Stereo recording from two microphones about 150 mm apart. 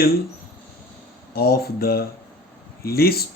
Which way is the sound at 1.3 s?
90° left.